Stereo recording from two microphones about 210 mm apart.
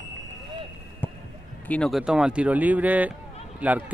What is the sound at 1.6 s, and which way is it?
Speech, 5° left (ahead or behind).